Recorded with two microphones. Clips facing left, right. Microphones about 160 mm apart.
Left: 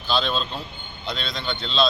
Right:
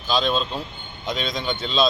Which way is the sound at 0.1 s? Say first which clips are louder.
Right 2 dB; centre (ahead or behind).